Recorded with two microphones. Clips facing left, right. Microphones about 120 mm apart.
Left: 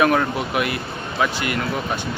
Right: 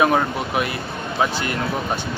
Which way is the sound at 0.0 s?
20° right (ahead or behind).